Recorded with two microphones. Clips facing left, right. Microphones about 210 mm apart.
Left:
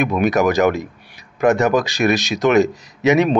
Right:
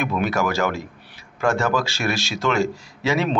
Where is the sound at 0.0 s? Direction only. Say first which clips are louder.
Left 6 dB; 15° left (ahead or behind).